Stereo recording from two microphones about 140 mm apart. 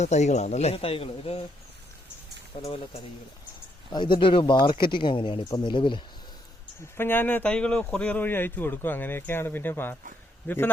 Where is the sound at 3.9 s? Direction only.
35° left (ahead or behind).